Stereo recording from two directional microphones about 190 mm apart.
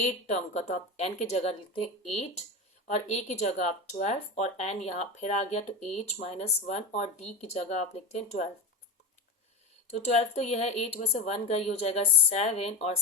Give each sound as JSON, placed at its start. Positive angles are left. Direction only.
{"t": 0.0, "sound": "speech", "side_deg": 35}
{"t": 9.9, "sound": "speech", "side_deg": 35}